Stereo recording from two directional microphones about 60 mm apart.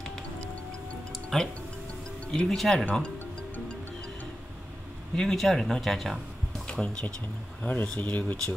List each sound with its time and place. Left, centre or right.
1.3 s speech: centre
5.1 s speech: centre
6.7 s speech: centre